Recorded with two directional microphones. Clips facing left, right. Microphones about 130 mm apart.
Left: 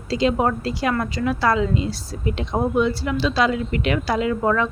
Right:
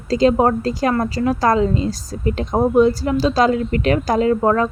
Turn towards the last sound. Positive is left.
turn(degrees=-40)  # may be behind; listen again after turning